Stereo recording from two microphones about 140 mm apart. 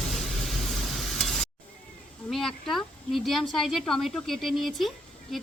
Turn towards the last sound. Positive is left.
turn(degrees=0)  # may be behind; listen again after turning